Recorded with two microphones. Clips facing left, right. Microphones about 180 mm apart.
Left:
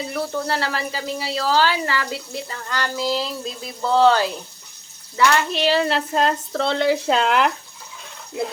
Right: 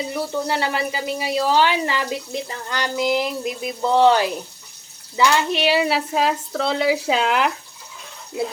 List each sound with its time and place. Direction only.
0.1 s speech: 15° right (ahead or behind)